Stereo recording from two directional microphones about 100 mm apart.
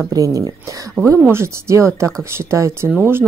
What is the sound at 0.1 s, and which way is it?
Speech, 35° right (ahead or behind).